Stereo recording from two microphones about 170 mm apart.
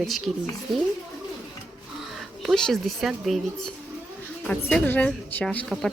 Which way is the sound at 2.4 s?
Centre (ahead or behind).